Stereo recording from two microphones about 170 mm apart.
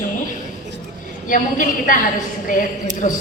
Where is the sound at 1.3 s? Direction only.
50° left (ahead or behind).